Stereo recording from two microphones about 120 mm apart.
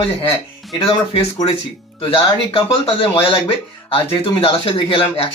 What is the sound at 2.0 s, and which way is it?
Speech, 50° left (ahead or behind).